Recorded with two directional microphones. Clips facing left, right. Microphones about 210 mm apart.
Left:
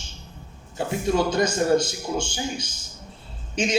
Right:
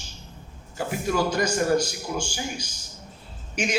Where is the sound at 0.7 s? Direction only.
25° left (ahead or behind).